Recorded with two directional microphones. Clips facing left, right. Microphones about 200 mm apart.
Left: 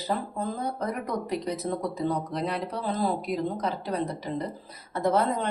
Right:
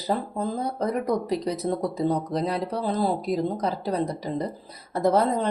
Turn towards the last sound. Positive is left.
turn(degrees=-35)  # may be behind; listen again after turning